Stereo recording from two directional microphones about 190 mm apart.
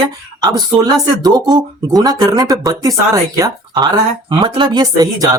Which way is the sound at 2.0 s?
20° right (ahead or behind).